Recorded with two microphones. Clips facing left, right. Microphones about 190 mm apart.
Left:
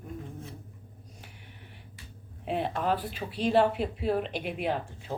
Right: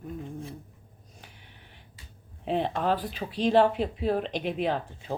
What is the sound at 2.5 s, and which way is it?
Speech, 5° left (ahead or behind).